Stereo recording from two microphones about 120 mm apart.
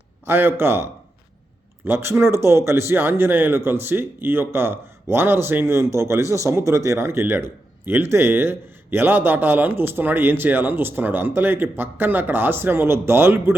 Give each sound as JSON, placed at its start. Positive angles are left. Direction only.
{"t": 0.3, "sound": "a man's voice", "side_deg": -20}